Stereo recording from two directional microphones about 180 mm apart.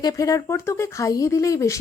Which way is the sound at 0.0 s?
20° left (ahead or behind).